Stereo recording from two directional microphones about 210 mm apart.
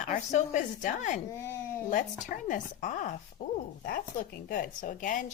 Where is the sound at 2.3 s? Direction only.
40° left (ahead or behind).